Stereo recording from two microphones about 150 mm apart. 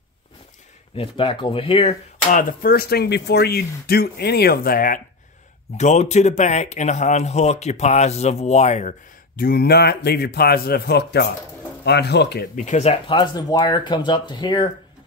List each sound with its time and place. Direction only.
0.9 s speech: 35° left (ahead or behind)
2.3 s speech: 75° left (ahead or behind)
5.8 s speech: 50° left (ahead or behind)
9.4 s speech: 90° left
12.6 s speech: 50° left (ahead or behind)
13.0 s speech: 30° left (ahead or behind)